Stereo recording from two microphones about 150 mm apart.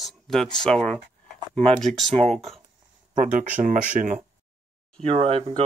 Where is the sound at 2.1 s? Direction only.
45° right (ahead or behind).